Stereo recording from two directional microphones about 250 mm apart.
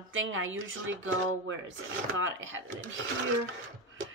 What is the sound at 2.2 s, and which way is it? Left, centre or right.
Speech, right.